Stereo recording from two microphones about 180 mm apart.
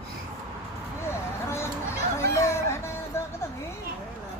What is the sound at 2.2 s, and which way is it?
Music, 15° left (ahead or behind).